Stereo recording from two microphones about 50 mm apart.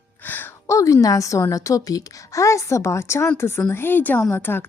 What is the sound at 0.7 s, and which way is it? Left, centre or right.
A woman's voice, left.